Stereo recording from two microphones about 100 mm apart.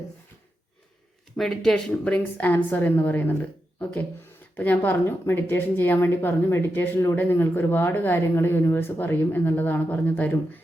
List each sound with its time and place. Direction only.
1.4 s a woman's voice: 5° left (ahead or behind)
4.5 s speech: 20° left (ahead or behind)